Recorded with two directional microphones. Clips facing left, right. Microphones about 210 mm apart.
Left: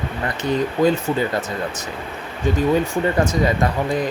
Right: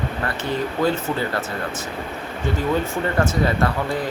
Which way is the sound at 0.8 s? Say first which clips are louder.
Left 3 dB; 15° left (ahead or behind).